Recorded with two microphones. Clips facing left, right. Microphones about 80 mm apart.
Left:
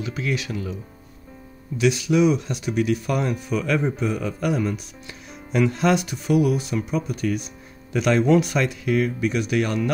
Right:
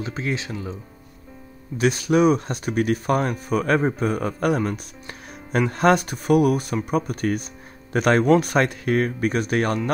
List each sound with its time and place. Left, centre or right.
0.0 s speech: right
1.8 s speech: right